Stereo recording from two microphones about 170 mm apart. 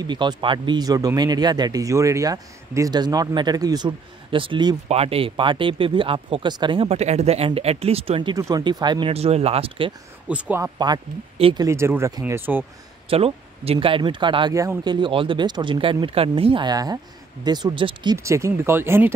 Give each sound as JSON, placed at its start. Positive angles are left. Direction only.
{"t": 0.0, "sound": "speech", "side_deg": -25}
{"t": 10.2, "sound": "speech", "side_deg": -10}
{"t": 10.6, "sound": "speech", "side_deg": -25}
{"t": 11.6, "sound": "speech", "side_deg": -15}
{"t": 13.1, "sound": "speech", "side_deg": -35}
{"t": 18.1, "sound": "speech", "side_deg": -15}